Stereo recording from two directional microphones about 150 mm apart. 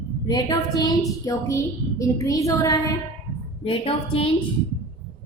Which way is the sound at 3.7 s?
40° left (ahead or behind).